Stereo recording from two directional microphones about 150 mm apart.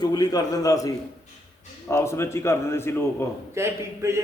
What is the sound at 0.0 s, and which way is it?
Speech, 25° left (ahead or behind).